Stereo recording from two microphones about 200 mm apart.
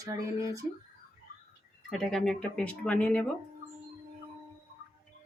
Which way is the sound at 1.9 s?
Centre (ahead or behind).